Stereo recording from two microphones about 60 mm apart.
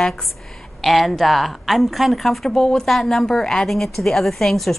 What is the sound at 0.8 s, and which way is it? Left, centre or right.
A woman's voice, centre.